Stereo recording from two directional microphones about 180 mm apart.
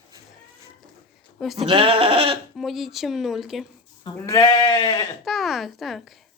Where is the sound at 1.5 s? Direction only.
30° right (ahead or behind).